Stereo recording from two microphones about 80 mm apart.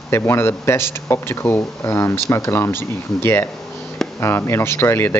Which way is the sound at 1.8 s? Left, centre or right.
Left.